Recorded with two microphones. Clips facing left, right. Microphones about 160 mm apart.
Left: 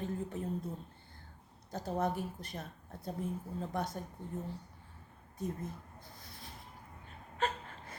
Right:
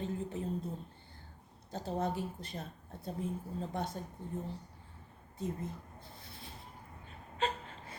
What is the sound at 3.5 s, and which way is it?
Speech, 25° right (ahead or behind).